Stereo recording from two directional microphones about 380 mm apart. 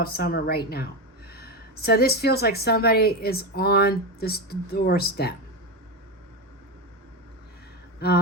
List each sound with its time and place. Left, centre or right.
0.0 s a woman's voice: left
8.0 s a woman's voice: left